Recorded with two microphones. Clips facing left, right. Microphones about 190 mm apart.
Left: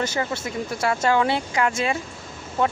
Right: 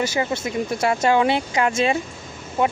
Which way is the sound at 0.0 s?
15° right (ahead or behind).